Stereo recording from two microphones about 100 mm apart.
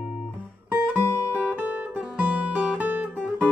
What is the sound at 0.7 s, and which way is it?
Music, 20° right (ahead or behind).